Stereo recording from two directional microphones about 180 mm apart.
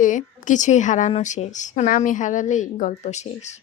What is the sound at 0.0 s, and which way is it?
A woman's voice, 45° left (ahead or behind).